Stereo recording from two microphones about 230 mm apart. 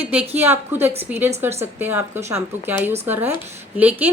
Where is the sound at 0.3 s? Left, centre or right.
Centre.